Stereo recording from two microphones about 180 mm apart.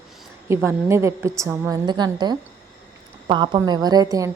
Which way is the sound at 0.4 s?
15° right (ahead or behind).